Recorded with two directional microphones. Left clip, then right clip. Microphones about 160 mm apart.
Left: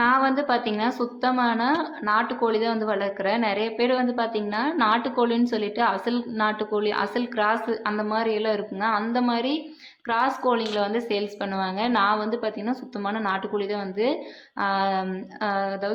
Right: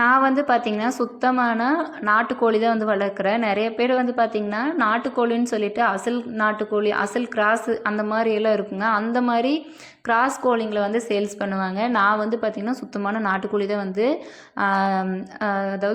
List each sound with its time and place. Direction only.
0.0 s a woman's voice: 25° right (ahead or behind)